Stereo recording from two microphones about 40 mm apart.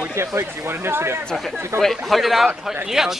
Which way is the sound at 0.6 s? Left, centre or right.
Right.